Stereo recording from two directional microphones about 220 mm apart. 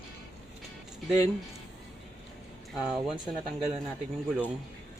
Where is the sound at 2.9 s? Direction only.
Centre (ahead or behind).